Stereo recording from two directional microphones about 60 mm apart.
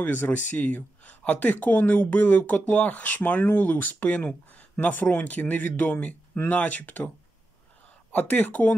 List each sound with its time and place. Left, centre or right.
0.0 s speech: left
8.1 s speech: left